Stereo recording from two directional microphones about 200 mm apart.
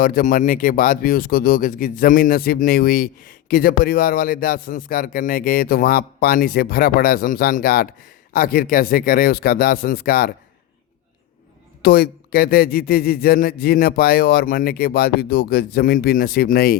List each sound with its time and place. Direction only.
0.0 s speech: 45° left (ahead or behind)
11.8 s speech: 50° left (ahead or behind)